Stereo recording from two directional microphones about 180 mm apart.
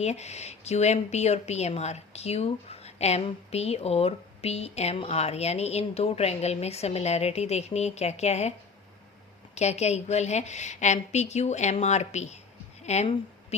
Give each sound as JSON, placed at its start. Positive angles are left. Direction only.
{"t": 0.0, "sound": "speech", "side_deg": 40}
{"t": 9.6, "sound": "a woman's voice", "side_deg": 40}